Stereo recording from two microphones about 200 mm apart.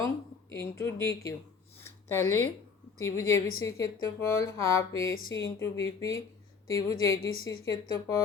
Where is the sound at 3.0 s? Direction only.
15° left (ahead or behind).